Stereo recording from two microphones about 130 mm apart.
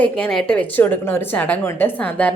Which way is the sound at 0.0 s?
5° left (ahead or behind).